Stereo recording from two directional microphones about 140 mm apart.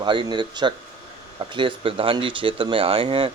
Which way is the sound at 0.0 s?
35° right (ahead or behind).